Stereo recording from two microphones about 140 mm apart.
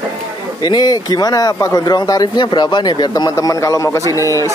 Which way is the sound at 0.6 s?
30° left (ahead or behind).